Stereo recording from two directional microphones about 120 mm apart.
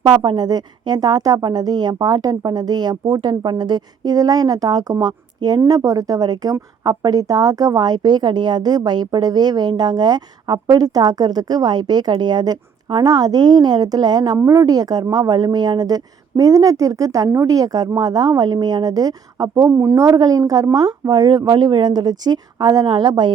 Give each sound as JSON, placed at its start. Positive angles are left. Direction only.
{"t": 0.0, "sound": "a woman's voice", "side_deg": -35}
{"t": 14.3, "sound": "a woman's voice", "side_deg": -25}